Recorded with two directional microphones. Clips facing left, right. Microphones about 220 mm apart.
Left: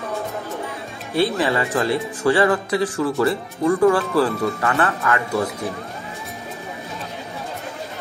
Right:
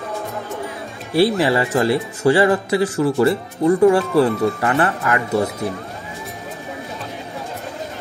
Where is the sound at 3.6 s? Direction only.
25° right (ahead or behind).